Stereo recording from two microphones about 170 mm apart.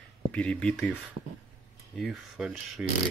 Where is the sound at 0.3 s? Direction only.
5° left (ahead or behind).